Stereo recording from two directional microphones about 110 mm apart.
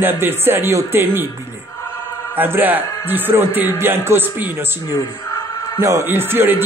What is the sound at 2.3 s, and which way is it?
Speech, 20° right (ahead or behind).